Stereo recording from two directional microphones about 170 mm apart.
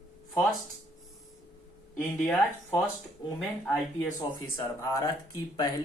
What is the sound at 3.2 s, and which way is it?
Speech, 20° left (ahead or behind).